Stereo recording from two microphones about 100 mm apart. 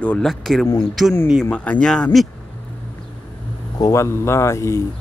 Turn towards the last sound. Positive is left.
turn(degrees=30)  # may be behind; listen again after turning